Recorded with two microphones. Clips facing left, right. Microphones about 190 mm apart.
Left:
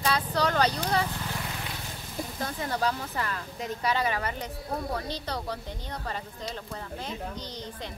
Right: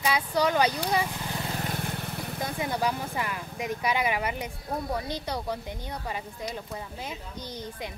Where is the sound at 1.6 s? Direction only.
55° right (ahead or behind).